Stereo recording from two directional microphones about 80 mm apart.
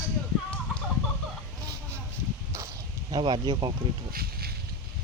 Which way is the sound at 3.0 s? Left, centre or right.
Right.